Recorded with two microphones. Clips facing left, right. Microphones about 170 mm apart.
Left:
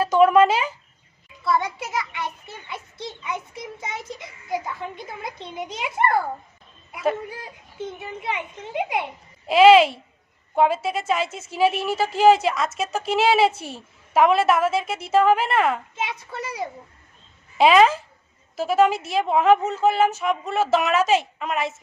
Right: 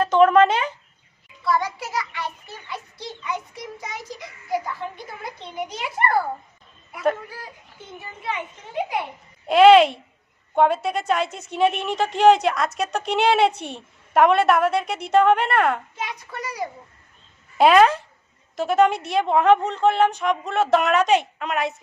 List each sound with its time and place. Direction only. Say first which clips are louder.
0.0 s a sound: even; 10° left (ahead or behind)
1.5 s a child's voice: even; 20° left (ahead or behind)
8.2 s a child's voice: right 1 dB; 20° left (ahead or behind)
9.5 s a woman's voice: right 1 dB; centre (ahead or behind)
16.0 s a child's voice: left 2 dB; 25° left (ahead or behind)
17.6 s a woman's voice: right 1 dB; centre (ahead or behind)